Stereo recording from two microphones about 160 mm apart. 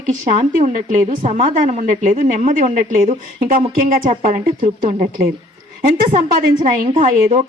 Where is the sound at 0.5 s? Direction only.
55° right (ahead or behind).